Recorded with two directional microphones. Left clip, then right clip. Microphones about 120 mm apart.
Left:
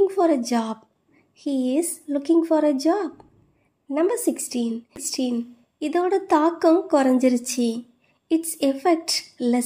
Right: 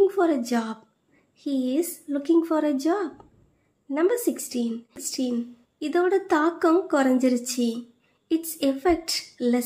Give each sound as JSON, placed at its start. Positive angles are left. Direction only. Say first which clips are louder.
{"t": 0.0, "sound": "a woman's voice", "louder": "left 2 dB", "side_deg": 25}